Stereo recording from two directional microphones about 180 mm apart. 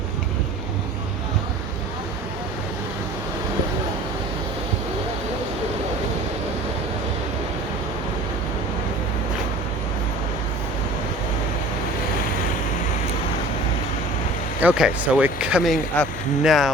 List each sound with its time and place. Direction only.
14.6 s speech: 5° right (ahead or behind)